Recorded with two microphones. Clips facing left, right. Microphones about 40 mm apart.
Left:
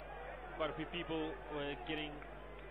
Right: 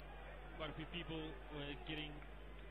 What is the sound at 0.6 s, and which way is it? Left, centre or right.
A man's voice, centre.